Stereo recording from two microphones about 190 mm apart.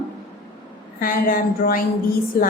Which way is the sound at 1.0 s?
50° left (ahead or behind).